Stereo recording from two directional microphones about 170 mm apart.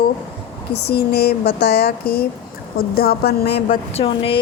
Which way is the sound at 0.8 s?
70° left (ahead or behind).